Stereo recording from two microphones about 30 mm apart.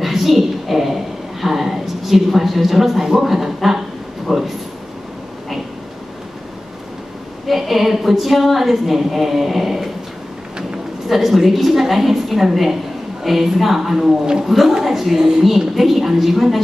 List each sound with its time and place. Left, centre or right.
0.0 s a sound: centre
3.1 s a woman's voice: centre
7.4 s a woman's voice: centre
11.1 s a woman's voice: centre
15.1 s a woman's voice: right
15.7 s a woman's voice: centre